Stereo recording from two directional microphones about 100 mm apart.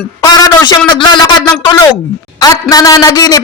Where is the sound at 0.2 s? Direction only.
40° left (ahead or behind).